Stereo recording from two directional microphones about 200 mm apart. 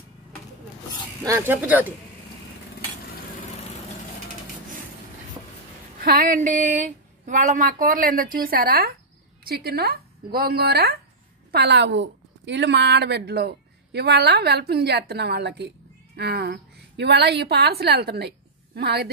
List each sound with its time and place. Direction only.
1.2 s speech: 15° right (ahead or behind)
5.9 s a woman's voice: 45° right (ahead or behind)